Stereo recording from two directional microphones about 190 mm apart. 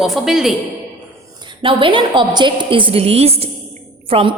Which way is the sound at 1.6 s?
25° right (ahead or behind).